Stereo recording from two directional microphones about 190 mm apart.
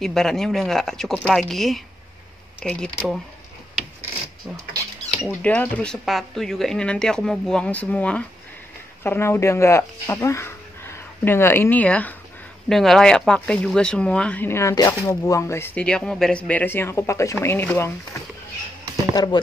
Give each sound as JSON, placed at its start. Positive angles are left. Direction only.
{"t": 0.0, "sound": "speech", "side_deg": 0}
{"t": 5.2, "sound": "speech", "side_deg": 10}
{"t": 19.1, "sound": "speech", "side_deg": 20}